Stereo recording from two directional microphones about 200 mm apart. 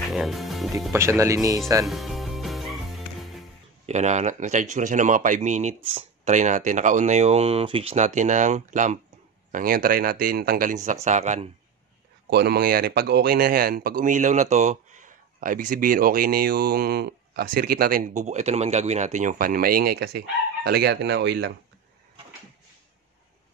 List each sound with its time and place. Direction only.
0.1 s music: centre (ahead or behind)
0.9 s speech: 15° right (ahead or behind)
1.9 s music: centre (ahead or behind)
3.8 s speech: 35° right (ahead or behind)
12.3 s speech: 55° right (ahead or behind)